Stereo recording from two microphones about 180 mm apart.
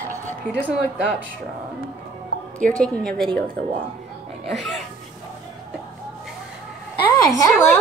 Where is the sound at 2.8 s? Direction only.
5° left (ahead or behind).